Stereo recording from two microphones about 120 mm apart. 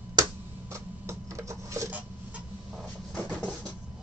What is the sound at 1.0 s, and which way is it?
Rub, 25° right (ahead or behind).